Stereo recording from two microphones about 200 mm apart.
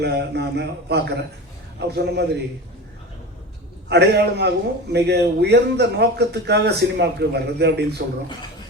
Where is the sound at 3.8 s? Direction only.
55° right (ahead or behind).